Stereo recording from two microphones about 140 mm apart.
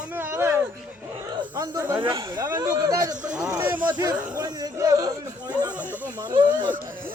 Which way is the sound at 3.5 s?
15° right (ahead or behind).